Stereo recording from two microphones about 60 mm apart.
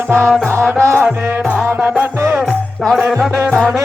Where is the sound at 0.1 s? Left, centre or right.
Right.